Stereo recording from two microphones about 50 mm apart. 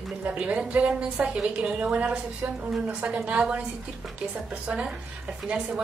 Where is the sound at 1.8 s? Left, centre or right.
Right.